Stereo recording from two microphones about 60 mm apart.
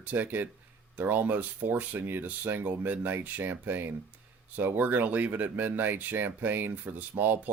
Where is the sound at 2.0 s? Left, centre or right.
Right.